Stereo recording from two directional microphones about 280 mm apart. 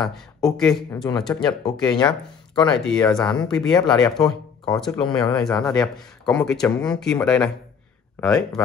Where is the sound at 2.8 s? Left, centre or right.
Centre.